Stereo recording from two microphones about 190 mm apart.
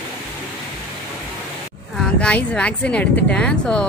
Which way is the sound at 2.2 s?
5° left (ahead or behind).